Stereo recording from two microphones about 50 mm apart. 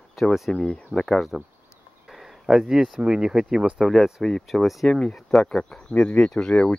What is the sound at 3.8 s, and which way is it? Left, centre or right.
Speech, centre.